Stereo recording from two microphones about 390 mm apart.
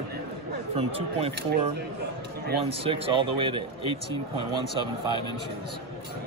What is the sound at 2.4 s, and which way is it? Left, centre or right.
Speech, centre.